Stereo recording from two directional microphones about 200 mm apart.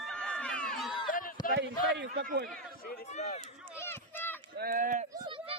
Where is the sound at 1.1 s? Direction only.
45° left (ahead or behind).